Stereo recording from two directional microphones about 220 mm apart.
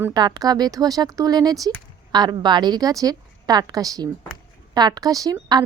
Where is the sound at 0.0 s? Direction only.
20° right (ahead or behind).